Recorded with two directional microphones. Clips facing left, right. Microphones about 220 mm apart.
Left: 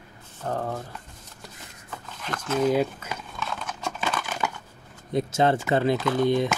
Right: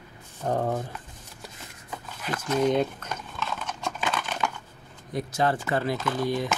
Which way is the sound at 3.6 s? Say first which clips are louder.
Left 1 dB; 5° left (ahead or behind).